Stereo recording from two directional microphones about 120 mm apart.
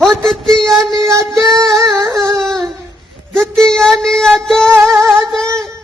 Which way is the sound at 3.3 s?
5° left (ahead or behind).